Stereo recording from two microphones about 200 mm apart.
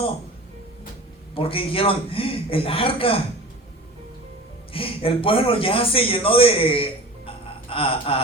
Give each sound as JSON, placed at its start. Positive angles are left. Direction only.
{"t": 1.4, "sound": "a man's voice", "side_deg": 25}
{"t": 4.7, "sound": "a man's voice", "side_deg": 25}
{"t": 7.3, "sound": "gasp", "side_deg": 25}